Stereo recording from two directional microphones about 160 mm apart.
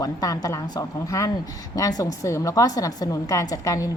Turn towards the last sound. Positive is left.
turn(degrees=20)  # may be behind; listen again after turning